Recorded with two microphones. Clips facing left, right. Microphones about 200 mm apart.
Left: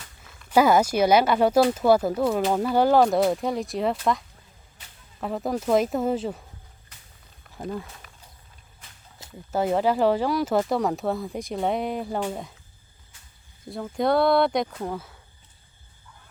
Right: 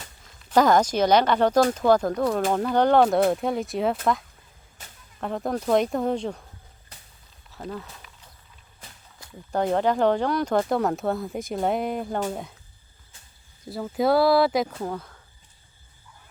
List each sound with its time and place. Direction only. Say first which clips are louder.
0.5 s speech: even; 10° left (ahead or behind)
4.8 s a sound: right 5 dB; 45° right (ahead or behind)
5.2 s speech: even; centre (ahead or behind)
7.6 s speech: left 2 dB; 10° left (ahead or behind)
9.5 s speech: even; 5° left (ahead or behind)
13.7 s speech: right 1 dB; 5° right (ahead or behind)